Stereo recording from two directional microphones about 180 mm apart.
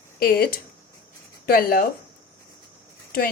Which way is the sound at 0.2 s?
55° left (ahead or behind).